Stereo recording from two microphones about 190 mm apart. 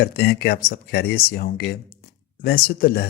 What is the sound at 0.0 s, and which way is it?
Speech, 55° left (ahead or behind).